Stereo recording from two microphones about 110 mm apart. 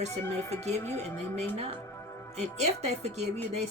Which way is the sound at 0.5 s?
80° right.